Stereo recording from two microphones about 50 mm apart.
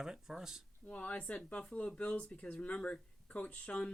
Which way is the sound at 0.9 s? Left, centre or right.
Left.